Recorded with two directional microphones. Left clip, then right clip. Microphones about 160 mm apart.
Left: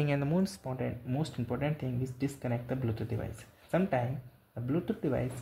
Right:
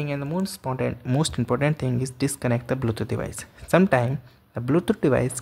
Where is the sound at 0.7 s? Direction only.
30° right (ahead or behind).